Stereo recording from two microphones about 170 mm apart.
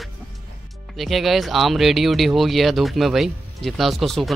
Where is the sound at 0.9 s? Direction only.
Centre (ahead or behind).